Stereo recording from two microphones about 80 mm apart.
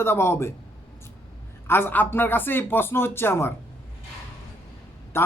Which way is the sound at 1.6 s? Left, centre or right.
Left.